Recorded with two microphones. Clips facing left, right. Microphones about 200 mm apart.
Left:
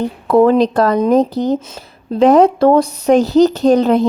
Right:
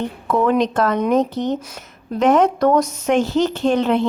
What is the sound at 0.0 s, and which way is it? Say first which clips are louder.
A woman's voice: left 7 dB; 35° left (ahead or behind).